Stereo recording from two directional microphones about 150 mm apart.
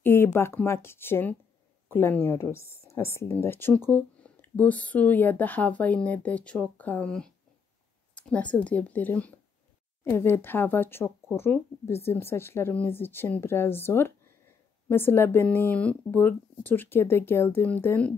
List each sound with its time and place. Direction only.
0.0 s speech: 15° left (ahead or behind)